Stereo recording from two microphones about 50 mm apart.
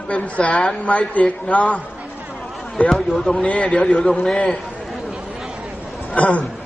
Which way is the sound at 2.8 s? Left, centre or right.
Centre.